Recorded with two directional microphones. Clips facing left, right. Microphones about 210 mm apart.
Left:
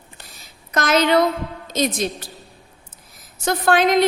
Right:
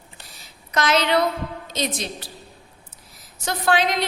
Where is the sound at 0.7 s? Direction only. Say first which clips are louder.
Left 3 dB; 50° left (ahead or behind).